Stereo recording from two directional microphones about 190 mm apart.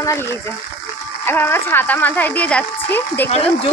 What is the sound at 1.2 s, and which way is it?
A woman's voice, 10° left (ahead or behind).